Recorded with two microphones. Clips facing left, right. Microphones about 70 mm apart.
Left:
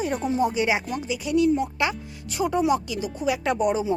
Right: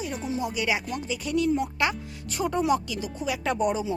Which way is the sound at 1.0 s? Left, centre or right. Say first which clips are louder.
Left 4 dB; centre.